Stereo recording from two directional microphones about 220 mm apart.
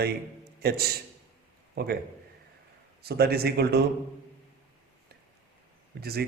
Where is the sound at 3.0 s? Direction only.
45° right (ahead or behind).